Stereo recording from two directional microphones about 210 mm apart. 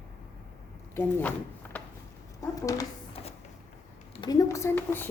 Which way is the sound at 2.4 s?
15° left (ahead or behind).